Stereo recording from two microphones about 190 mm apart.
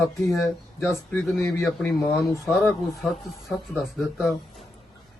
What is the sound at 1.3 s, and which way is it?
Speech, 15° left (ahead or behind).